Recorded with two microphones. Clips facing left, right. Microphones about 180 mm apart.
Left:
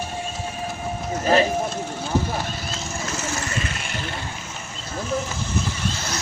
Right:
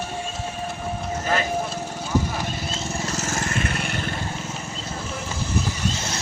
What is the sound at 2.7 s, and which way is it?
Vehicle, 40° right (ahead or behind).